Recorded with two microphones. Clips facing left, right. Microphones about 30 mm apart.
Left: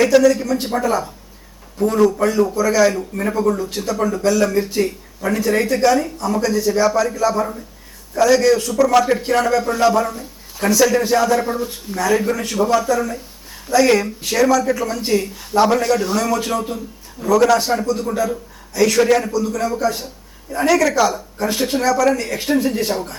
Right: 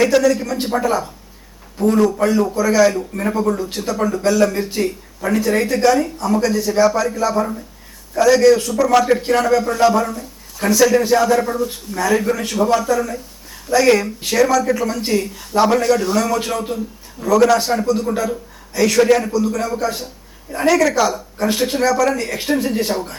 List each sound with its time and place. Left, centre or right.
0.0 s a man's voice: centre
11.4 s speech: centre
11.9 s a man's voice: centre